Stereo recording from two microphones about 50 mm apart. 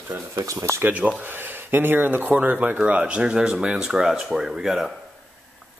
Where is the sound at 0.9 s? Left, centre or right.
Right.